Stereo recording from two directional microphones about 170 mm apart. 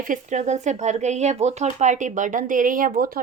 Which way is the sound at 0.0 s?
50° right (ahead or behind).